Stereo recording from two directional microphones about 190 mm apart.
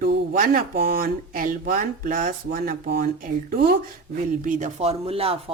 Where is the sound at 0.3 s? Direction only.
45° right (ahead or behind).